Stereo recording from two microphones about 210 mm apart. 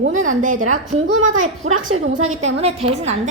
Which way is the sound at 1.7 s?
75° right (ahead or behind).